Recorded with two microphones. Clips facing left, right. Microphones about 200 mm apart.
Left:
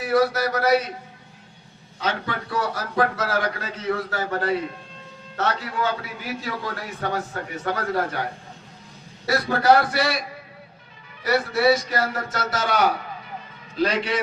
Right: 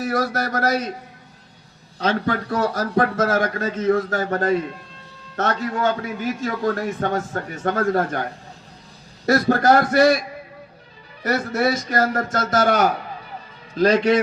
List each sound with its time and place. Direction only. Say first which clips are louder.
0.0 s a man's voice: left 2 dB; 45° right (ahead or behind)
2.0 s a man's voice: right 6 dB; 45° right (ahead or behind)
9.2 s a man's voice: right 3 dB; 45° right (ahead or behind)
11.2 s a man's voice: even; 50° right (ahead or behind)
13.8 s a man's voice: right 7 dB; 45° right (ahead or behind)